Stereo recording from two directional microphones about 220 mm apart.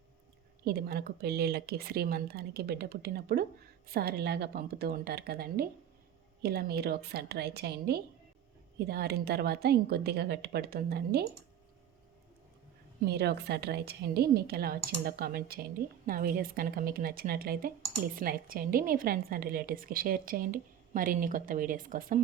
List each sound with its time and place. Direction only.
0.6 s speech: 45° right (ahead or behind)
13.1 s a woman's voice: 45° right (ahead or behind)